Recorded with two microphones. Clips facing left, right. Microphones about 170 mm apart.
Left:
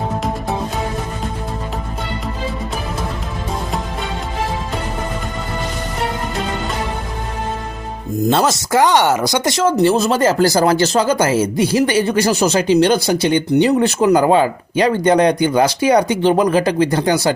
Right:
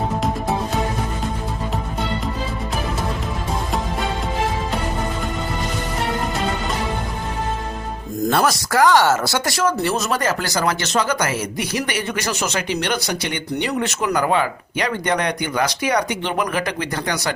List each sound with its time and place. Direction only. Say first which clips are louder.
8.3 s speech: left 3 dB; 25° left (ahead or behind)